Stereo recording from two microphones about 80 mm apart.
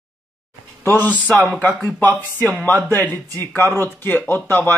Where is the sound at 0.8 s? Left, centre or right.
Left.